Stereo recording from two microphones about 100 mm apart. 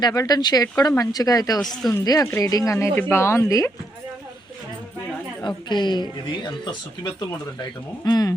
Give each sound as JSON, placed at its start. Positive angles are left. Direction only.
{"t": 0.0, "sound": "speech", "side_deg": 40}
{"t": 1.6, "sound": "speech", "side_deg": 5}
{"t": 1.9, "sound": "speech", "side_deg": 35}
{"t": 3.1, "sound": "speech", "side_deg": 25}
{"t": 5.4, "sound": "speech", "side_deg": 50}